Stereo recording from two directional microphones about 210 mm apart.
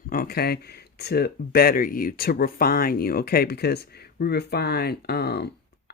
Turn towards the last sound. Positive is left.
turn(degrees=50)  # may be behind; listen again after turning